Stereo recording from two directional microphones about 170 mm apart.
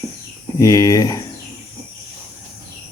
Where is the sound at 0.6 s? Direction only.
20° left (ahead or behind).